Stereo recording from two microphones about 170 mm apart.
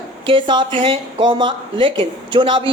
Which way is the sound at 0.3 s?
30° right (ahead or behind).